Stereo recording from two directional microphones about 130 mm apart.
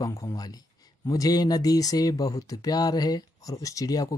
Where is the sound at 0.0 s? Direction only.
25° left (ahead or behind).